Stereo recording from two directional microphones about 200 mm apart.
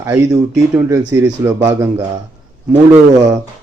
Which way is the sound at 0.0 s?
15° right (ahead or behind).